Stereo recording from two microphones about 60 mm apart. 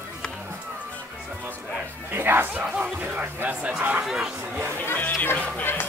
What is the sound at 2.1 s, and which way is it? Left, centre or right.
Speech, right.